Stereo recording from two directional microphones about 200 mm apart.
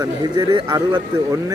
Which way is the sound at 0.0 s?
20° right (ahead or behind).